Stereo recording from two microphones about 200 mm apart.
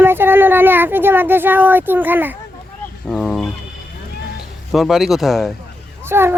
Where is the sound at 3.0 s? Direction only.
5° left (ahead or behind).